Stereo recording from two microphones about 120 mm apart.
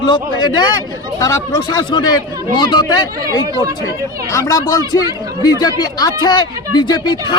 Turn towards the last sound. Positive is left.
turn(degrees=35)  # may be behind; listen again after turning